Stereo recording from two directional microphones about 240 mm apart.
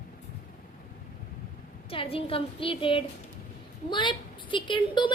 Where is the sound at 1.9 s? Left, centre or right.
Left.